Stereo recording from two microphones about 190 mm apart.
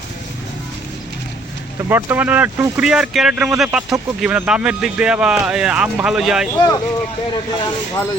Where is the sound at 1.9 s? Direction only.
10° right (ahead or behind).